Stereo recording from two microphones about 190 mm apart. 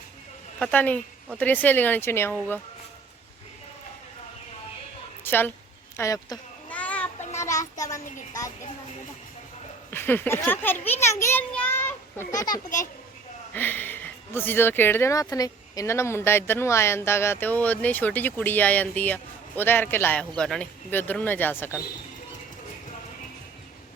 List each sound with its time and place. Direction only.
0.6 s speech: 10° left (ahead or behind)
5.2 s a sound: 10° left (ahead or behind)
6.0 s speech: 20° left (ahead or behind)
6.7 s child singing: 10° left (ahead or behind)
7.3 s a child's voice: 15° left (ahead or behind)
9.9 s a child's voice: 10° left (ahead or behind)